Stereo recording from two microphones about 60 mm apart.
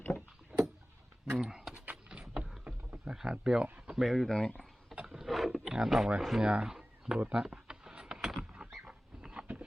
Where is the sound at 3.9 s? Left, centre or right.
Centre.